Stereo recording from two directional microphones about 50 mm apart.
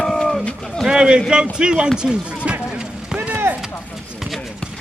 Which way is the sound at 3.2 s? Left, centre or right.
Right.